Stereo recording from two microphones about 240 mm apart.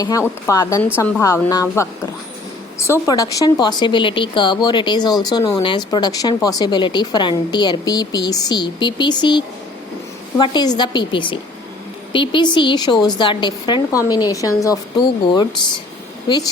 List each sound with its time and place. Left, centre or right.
0.4 s speech: centre